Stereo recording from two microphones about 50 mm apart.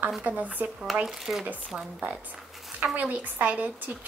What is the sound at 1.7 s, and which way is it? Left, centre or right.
Speech, right.